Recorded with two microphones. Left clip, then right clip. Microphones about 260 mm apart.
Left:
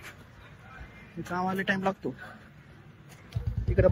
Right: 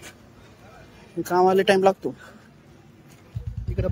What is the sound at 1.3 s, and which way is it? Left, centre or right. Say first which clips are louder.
Speech: right 12 dB; right.